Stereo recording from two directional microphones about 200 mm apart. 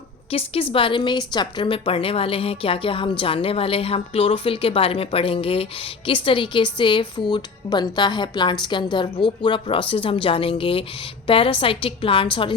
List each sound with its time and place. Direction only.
0.3 s a woman's voice: 30° left (ahead or behind)